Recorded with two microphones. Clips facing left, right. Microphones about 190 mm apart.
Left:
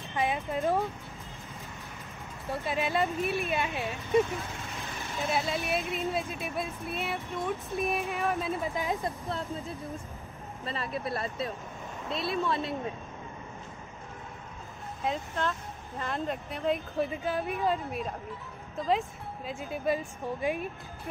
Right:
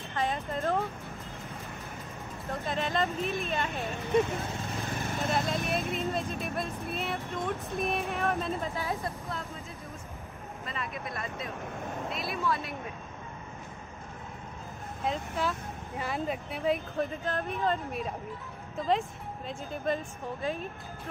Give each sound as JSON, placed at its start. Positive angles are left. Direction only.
{"t": 0.1, "sound": "speech", "side_deg": 15}
{"t": 2.6, "sound": "speech", "side_deg": 10}
{"t": 5.3, "sound": "speech", "side_deg": 5}
{"t": 8.6, "sound": "speech", "side_deg": 15}
{"t": 9.3, "sound": "speech", "side_deg": 30}
{"t": 15.0, "sound": "speech", "side_deg": -5}